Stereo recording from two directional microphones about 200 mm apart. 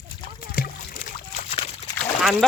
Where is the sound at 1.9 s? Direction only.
Centre (ahead or behind).